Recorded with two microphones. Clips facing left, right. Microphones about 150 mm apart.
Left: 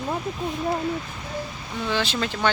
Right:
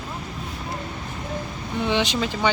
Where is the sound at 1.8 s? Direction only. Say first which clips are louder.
Right 3 dB; 20° right (ahead or behind).